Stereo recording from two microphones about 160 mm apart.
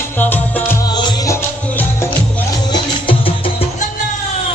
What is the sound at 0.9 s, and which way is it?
Music, 25° left (ahead or behind).